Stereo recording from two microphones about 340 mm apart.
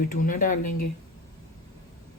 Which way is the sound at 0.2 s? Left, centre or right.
Left.